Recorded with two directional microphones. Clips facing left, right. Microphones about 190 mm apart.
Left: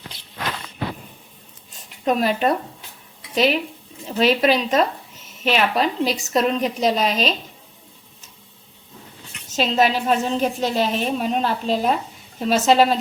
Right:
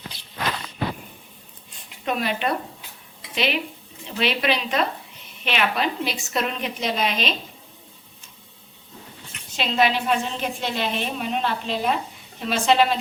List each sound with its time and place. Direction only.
1.7 s a sound: 40° left (ahead or behind)
3.3 s a woman's voice: 40° left (ahead or behind)
9.5 s a woman's voice: 40° left (ahead or behind)